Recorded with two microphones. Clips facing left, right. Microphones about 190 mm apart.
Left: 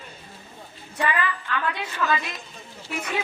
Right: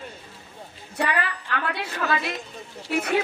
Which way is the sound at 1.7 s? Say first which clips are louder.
Left 1 dB; 65° right (ahead or behind).